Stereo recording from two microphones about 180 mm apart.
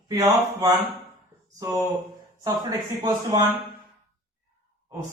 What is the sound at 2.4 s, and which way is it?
Speech, 20° right (ahead or behind).